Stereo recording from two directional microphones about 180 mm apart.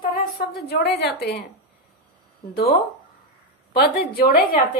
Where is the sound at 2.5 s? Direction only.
60° left (ahead or behind).